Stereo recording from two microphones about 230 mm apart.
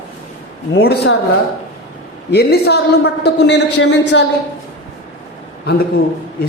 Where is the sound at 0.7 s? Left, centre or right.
Left.